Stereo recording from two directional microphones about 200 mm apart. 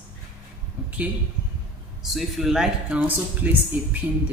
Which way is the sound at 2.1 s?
Centre (ahead or behind).